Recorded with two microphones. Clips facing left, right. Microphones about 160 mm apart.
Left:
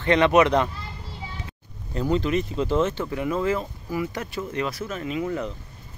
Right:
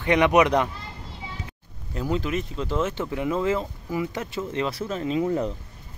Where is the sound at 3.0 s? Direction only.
20° right (ahead or behind).